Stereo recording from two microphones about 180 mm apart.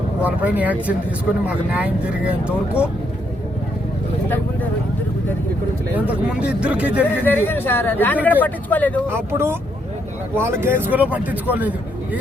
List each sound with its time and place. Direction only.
0.2 s speech: 10° right (ahead or behind)
5.9 s speech: 5° right (ahead or behind)
7.0 s speech: 10° left (ahead or behind)
9.0 s speech: 15° right (ahead or behind)